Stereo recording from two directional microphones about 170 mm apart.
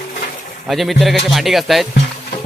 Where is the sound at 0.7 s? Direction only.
Centre (ahead or behind).